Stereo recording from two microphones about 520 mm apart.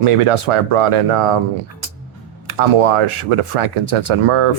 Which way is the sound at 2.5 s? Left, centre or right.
Right.